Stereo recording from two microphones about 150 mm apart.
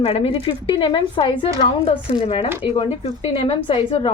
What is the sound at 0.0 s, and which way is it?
A woman's voice, 40° left (ahead or behind).